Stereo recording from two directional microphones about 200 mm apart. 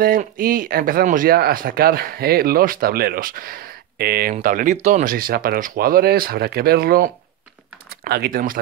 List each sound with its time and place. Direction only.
0.0 s speech: 45° right (ahead or behind)